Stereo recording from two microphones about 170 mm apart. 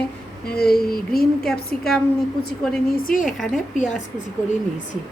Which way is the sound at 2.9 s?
55° left (ahead or behind).